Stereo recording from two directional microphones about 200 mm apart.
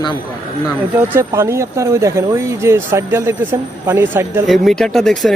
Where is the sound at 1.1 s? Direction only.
15° right (ahead or behind).